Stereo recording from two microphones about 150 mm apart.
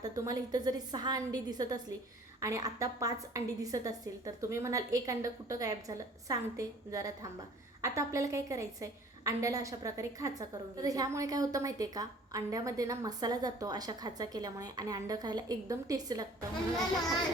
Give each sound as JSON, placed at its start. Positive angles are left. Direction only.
{"t": 0.0, "sound": "a woman's voice", "side_deg": -25}